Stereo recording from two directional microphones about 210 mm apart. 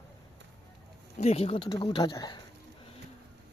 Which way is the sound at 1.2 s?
30° left (ahead or behind).